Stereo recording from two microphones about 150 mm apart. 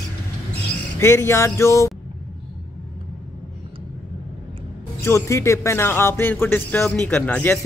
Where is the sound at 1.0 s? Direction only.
15° left (ahead or behind).